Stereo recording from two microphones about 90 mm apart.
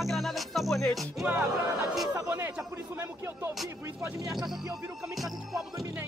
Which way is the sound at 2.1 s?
30° right (ahead or behind).